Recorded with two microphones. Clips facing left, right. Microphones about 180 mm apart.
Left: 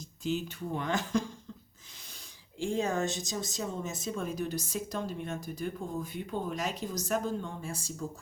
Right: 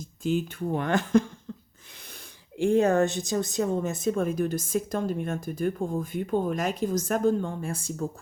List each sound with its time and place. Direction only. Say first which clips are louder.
0.2 s speech: right 6 dB; 50° right (ahead or behind)
2.6 s speech: right 9 dB; 60° right (ahead or behind)